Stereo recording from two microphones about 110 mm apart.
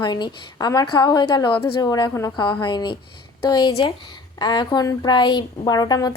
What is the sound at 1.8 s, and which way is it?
Speech, 35° left (ahead or behind).